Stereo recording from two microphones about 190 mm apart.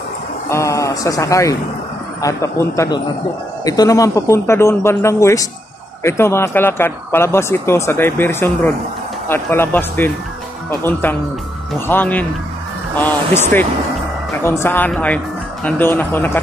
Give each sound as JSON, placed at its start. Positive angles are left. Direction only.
{"t": 0.5, "sound": "speech", "side_deg": 15}